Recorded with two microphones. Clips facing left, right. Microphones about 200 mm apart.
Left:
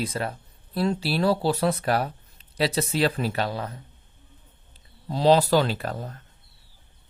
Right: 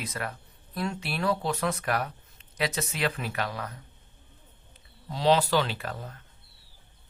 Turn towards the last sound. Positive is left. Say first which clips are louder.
# left 6 dB
turn(degrees=40)  # may be behind; listen again after turning